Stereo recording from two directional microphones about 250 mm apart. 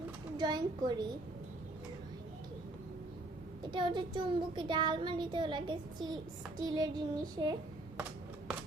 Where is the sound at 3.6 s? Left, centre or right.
Centre.